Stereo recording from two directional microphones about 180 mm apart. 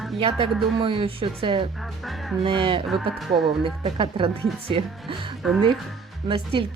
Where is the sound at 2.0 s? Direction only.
Centre (ahead or behind).